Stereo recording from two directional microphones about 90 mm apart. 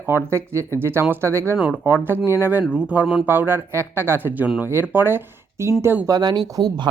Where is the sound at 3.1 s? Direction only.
20° right (ahead or behind).